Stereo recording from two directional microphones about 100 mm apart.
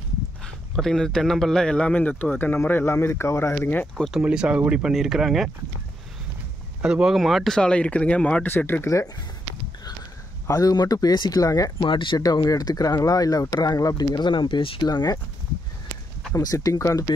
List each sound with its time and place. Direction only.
0.7 s speech: 5° left (ahead or behind)
4.2 s speech: 10° right (ahead or behind)
6.8 s speech: 10° right (ahead or behind); by 9.0 s 25° left (ahead or behind)
10.4 s speech: 35° left (ahead or behind)
11.8 s speech: 55° left (ahead or behind)
12.4 s speech: 40° left (ahead or behind); by 14.9 s 60° left (ahead or behind)
14.9 s speech: 45° left (ahead or behind)
16.3 s speech: 35° left (ahead or behind)